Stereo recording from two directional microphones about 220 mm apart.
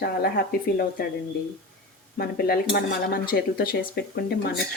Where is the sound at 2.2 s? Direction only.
45° left (ahead or behind).